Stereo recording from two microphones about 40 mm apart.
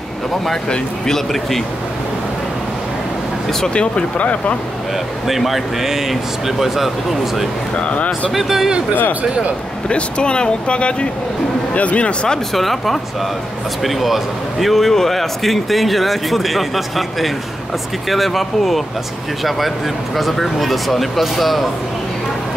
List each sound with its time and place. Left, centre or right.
0.7 s speech: centre
3.7 s speech: left
5.3 s a man's voice: centre
7.8 s speech: left
8.3 s a man's voice: centre
9.8 s speech: left
12.5 s a man's voice: centre
20.2 s a man's voice: centre